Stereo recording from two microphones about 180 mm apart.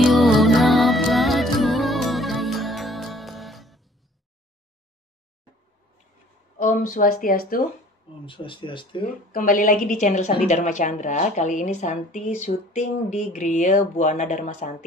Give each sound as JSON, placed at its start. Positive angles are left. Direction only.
{"t": 0.0, "sound": "music", "side_deg": 0}
{"t": 6.6, "sound": "a woman's voice", "side_deg": 45}
{"t": 8.3, "sound": "speech", "side_deg": 30}
{"t": 9.3, "sound": "a woman's voice", "side_deg": 50}